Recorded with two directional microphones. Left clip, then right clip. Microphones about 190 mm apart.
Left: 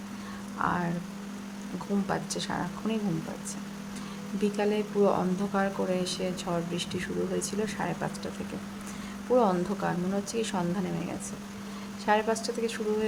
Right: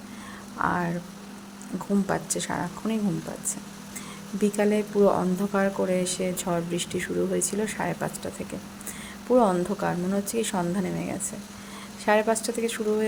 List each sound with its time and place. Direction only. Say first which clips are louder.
0.6 s speech: right 3 dB; 10° right (ahead or behind)
2.0 s speech: right 3 dB; 15° right (ahead or behind)
4.5 s speech: right 4 dB; 10° right (ahead or behind)
9.3 s speech: right 3 dB; 10° right (ahead or behind)